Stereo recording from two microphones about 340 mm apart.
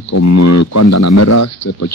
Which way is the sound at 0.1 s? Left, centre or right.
Left.